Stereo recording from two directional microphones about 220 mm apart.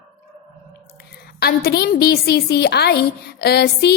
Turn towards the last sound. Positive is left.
turn(degrees=45)  # may be behind; listen again after turning